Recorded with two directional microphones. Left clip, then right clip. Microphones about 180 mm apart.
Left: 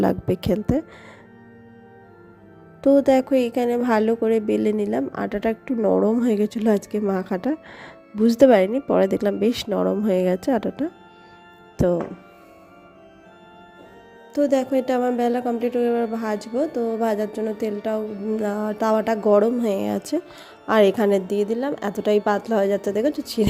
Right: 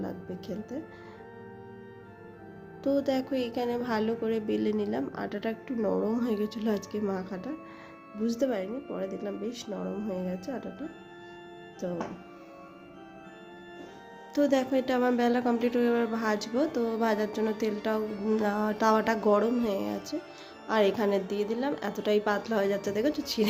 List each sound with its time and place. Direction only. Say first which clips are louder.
0.0 s speech: left 17 dB; 55° left (ahead or behind)
2.8 s a woman's voice: left 12 dB; 45° left (ahead or behind)
14.3 s a woman's voice: left 6 dB; 30° left (ahead or behind)
15.1 s a woman's voice: left 5 dB; 25° left (ahead or behind)
19.6 s a woman's voice: left 8 dB; 50° left (ahead or behind); by 23.5 s 35° left (ahead or behind)